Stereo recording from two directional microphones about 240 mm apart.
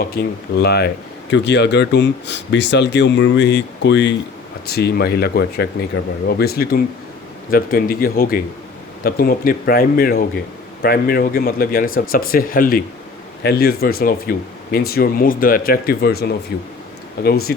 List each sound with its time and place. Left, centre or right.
0.0 s speech: left